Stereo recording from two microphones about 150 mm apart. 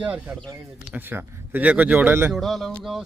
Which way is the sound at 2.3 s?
Centre (ahead or behind).